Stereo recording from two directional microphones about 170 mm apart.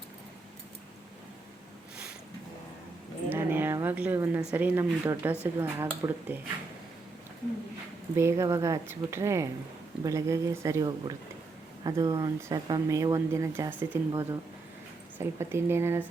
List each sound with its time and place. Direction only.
3.2 s a sound: 10° right (ahead or behind)
4.5 s speech: 10° right (ahead or behind)
8.1 s speech: 15° right (ahead or behind)